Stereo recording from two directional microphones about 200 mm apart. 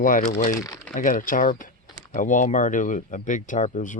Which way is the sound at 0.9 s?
40° left (ahead or behind).